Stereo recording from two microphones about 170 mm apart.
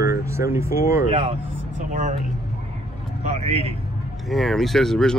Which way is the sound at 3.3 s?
40° right (ahead or behind).